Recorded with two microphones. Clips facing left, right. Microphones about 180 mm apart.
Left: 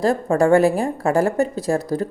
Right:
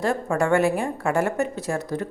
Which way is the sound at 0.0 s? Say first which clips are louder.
Left 6 dB; 35° left (ahead or behind).